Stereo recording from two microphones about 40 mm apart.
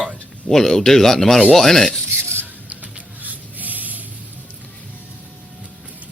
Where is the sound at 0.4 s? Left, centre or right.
Centre.